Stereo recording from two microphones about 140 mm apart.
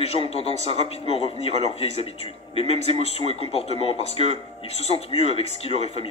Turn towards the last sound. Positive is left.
turn(degrees=45)  # may be behind; listen again after turning